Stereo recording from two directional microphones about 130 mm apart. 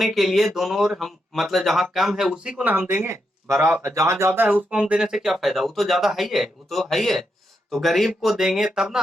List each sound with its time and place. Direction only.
0.0 s speech: centre (ahead or behind); by 4.3 s 25° right (ahead or behind)
4.7 s speech: 5° right (ahead or behind)